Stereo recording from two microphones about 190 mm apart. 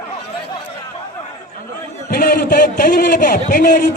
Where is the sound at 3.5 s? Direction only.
45° left (ahead or behind).